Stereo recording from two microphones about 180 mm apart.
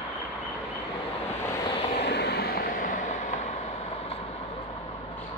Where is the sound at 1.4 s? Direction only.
20° left (ahead or behind).